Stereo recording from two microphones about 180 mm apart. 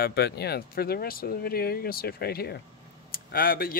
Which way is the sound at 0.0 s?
65° left (ahead or behind).